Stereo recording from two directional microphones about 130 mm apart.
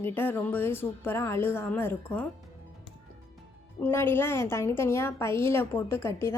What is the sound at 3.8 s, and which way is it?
A woman's voice, 20° left (ahead or behind).